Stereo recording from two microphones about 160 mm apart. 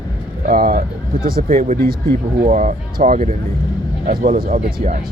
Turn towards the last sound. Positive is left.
turn(degrees=-60)  # may be behind; listen again after turning